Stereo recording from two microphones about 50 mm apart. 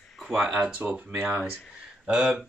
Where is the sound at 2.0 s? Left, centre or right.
Centre.